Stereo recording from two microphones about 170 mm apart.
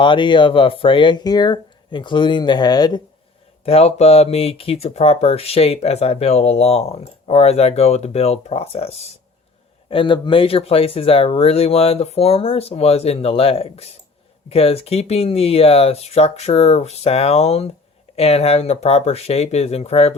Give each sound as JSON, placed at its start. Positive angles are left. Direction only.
{"t": 0.0, "sound": "speech", "side_deg": 30}
{"t": 3.6, "sound": "speech", "side_deg": 35}